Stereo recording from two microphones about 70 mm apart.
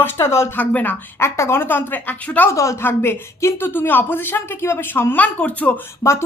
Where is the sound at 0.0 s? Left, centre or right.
Left.